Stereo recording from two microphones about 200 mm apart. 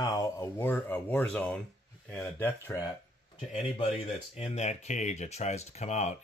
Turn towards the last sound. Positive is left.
turn(degrees=35)  # may be behind; listen again after turning